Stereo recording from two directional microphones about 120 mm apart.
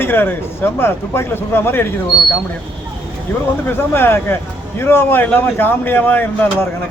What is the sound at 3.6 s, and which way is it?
A man's voice, 20° left (ahead or behind).